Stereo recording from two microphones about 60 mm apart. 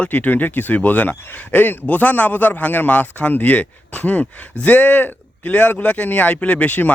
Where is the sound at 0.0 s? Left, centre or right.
Left.